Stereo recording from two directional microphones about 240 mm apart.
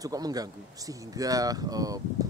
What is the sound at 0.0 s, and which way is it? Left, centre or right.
Speech, centre.